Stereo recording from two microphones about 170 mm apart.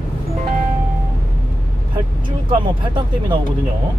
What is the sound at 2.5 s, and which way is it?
Speech, 30° right (ahead or behind).